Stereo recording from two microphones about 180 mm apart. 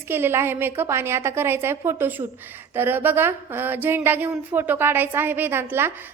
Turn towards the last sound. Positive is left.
turn(degrees=-10)  # may be behind; listen again after turning